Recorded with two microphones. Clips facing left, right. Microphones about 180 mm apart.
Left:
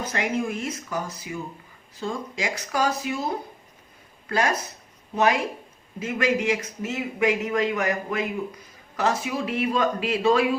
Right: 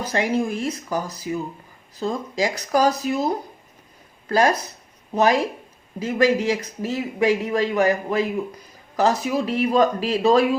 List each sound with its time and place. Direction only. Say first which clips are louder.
0.0 s a man's voice: right 4 dB; 30° right (ahead or behind)